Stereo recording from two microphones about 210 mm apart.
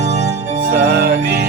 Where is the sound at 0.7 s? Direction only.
50° right (ahead or behind).